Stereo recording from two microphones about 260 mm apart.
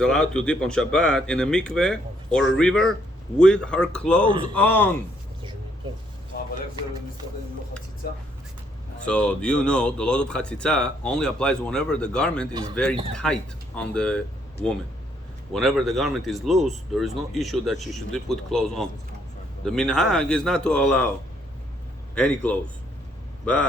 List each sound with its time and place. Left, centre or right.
0.0 s speech: centre
9.0 s speech: centre
15.5 s speech: centre
22.1 s speech: centre